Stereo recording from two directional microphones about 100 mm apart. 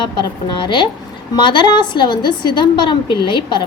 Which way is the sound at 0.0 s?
50° left (ahead or behind).